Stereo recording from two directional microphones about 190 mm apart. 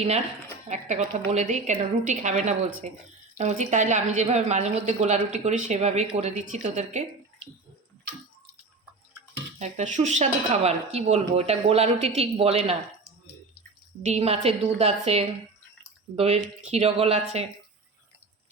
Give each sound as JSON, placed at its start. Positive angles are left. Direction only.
{"t": 0.7, "sound": "a woman's voice", "side_deg": -40}
{"t": 9.6, "sound": "a woman's voice", "side_deg": -40}
{"t": 14.0, "sound": "a woman's voice", "side_deg": -35}